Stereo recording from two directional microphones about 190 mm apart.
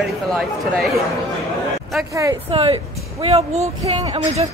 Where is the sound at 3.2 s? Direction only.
35° right (ahead or behind).